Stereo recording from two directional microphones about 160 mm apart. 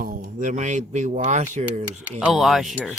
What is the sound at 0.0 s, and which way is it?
Speech, 60° right (ahead or behind).